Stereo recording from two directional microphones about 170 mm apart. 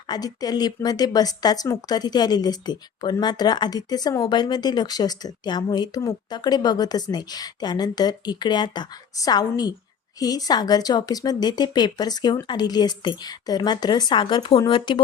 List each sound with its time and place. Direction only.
0.1 s speech: 20° left (ahead or behind)